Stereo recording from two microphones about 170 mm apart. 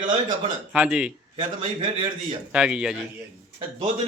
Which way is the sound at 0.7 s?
5° right (ahead or behind).